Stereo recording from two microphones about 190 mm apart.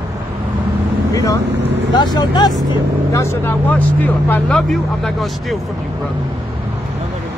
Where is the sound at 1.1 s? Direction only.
15° left (ahead or behind).